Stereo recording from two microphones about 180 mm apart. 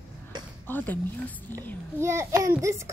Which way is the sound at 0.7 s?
10° left (ahead or behind).